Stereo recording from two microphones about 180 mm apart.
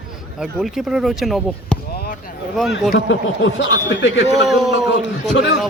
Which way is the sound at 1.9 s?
60° left (ahead or behind).